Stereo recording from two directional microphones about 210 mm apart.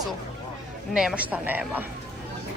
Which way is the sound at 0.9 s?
5° right (ahead or behind).